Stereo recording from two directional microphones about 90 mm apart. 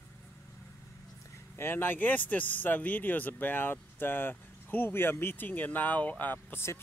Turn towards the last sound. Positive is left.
turn(degrees=25)  # may be behind; listen again after turning